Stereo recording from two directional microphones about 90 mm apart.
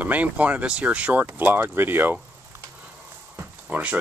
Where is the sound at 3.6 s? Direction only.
15° right (ahead or behind).